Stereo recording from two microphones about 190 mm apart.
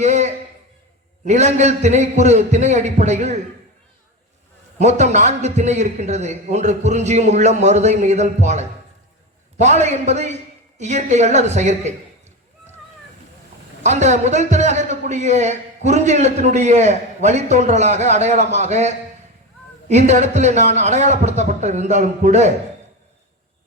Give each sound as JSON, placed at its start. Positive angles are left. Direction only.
{"t": 0.0, "sound": "a sound", "side_deg": -35}
{"t": 1.2, "sound": "a man's voice", "side_deg": -35}
{"t": 4.8, "sound": "a man's voice", "side_deg": -35}
{"t": 13.8, "sound": "a man's voice", "side_deg": -35}